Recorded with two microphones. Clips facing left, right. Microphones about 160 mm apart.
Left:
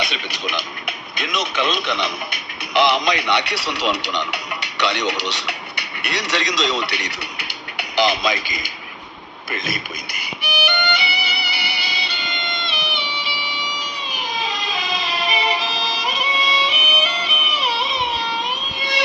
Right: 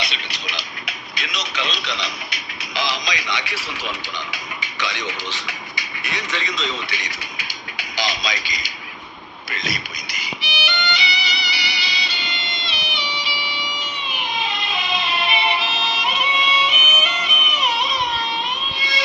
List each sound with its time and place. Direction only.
0.0 s speech: 50° left (ahead or behind)
10.2 s music: 55° left (ahead or behind); by 17.8 s 30° left (ahead or behind)
18.8 s music: 60° left (ahead or behind)